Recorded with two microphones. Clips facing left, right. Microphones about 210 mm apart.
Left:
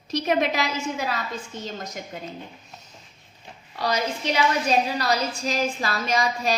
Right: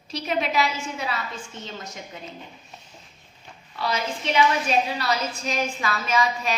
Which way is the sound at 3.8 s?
40° left (ahead or behind).